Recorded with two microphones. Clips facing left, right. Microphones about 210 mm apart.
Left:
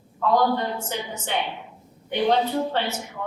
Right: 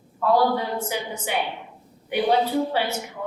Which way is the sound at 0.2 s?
10° right (ahead or behind).